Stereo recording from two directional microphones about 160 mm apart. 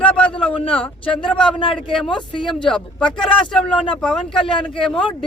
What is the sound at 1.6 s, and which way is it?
Speech, 35° left (ahead or behind).